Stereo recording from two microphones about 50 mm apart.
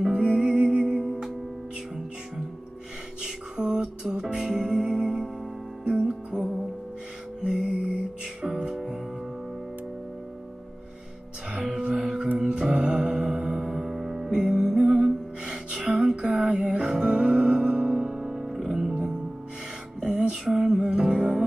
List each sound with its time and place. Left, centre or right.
0.0 s music: centre
3.2 s music: centre
7.4 s music: centre
11.5 s music: centre
14.3 s music: centre